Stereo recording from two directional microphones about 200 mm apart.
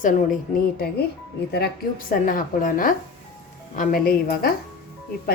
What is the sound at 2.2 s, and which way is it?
A woman's voice, 45° left (ahead or behind).